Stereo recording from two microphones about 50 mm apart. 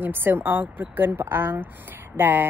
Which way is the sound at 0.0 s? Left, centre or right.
Right.